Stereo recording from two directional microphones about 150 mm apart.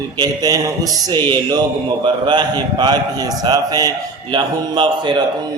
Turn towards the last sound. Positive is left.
turn(degrees=-30)  # may be behind; listen again after turning